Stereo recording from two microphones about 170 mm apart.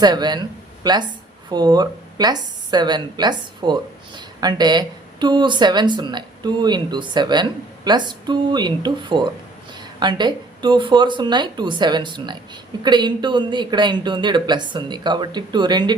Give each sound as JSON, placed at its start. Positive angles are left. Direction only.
{"t": 0.0, "sound": "a woman's voice", "side_deg": -25}